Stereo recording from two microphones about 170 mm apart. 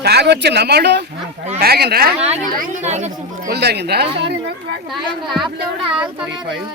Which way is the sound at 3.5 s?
75° right (ahead or behind).